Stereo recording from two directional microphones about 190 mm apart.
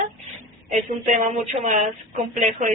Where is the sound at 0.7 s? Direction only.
40° right (ahead or behind).